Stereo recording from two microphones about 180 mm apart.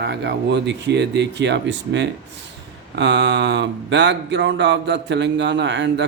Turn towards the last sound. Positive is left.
turn(degrees=-75)  # may be behind; listen again after turning